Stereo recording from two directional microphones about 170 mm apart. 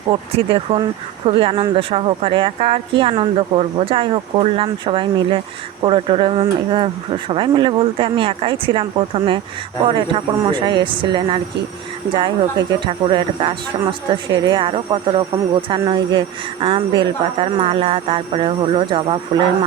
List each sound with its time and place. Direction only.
0.1 s speech: 35° right (ahead or behind)